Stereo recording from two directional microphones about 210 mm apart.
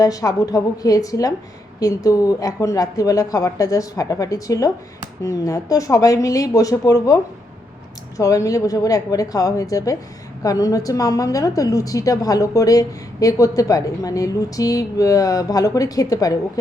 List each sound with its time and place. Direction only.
0.0 s a woman's voice: 15° left (ahead or behind)
8.2 s a woman's voice: 15° left (ahead or behind)